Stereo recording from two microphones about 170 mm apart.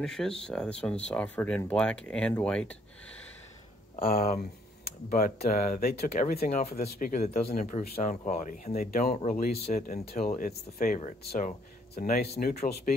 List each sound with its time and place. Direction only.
0.0 s speech: 5° left (ahead or behind)
4.1 s speech: 60° left (ahead or behind); by 9.4 s 40° left (ahead or behind)
9.4 s speech: 55° left (ahead or behind)
12.2 s speech: 65° left (ahead or behind)
12.9 s speech: 50° left (ahead or behind)